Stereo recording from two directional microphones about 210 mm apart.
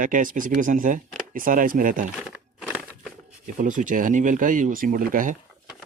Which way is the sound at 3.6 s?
40° right (ahead or behind).